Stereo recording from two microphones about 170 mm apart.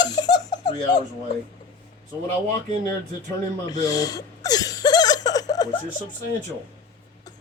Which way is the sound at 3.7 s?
20° left (ahead or behind).